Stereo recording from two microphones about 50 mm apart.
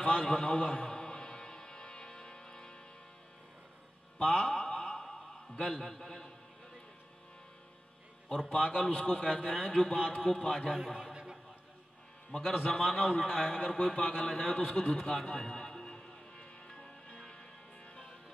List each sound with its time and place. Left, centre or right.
0.0 s music: centre
4.2 s mantra: centre
5.6 s a man's voice: centre
8.5 s a man's voice: left
9.3 s a man's voice: centre
10.8 s a man's voice: centre
12.3 s a man's voice: centre
15.2 s music: centre